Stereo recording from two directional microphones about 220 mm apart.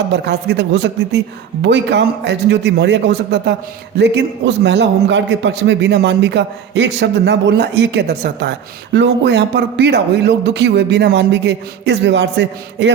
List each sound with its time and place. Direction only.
0.1 s a man's voice: 50° right (ahead or behind)